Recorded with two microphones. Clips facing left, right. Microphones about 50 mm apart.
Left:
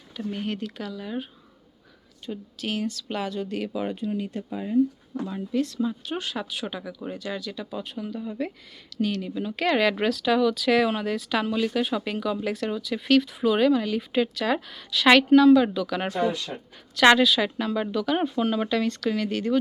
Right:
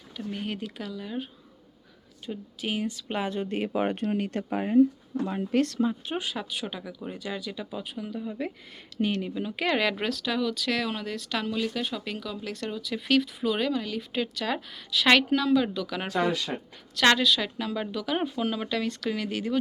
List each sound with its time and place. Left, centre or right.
0.2 s speech: centre
2.2 s speech: centre; by 3.8 s right
3.8 s speech: right
4.4 s speech: right
5.8 s speech: right
6.1 s speech: centre
9.0 s speech: right
9.3 s speech: centre
16.1 s speech: right
17.1 s speech: centre